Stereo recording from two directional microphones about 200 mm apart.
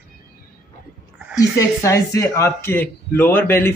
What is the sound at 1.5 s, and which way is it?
Speech, 15° left (ahead or behind).